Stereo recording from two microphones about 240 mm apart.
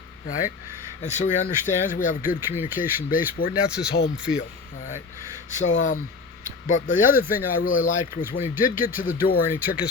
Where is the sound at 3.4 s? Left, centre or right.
Left.